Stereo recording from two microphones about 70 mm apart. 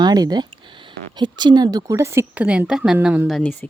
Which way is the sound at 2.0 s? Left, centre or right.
Right.